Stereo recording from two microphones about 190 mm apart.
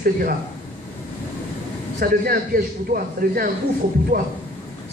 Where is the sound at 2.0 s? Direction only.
50° right (ahead or behind).